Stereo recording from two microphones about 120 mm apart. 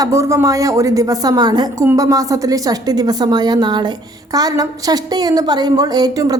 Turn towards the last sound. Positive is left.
turn(degrees=-30)  # may be behind; listen again after turning